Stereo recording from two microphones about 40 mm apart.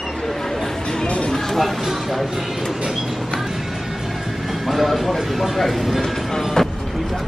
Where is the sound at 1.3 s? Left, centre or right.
Centre.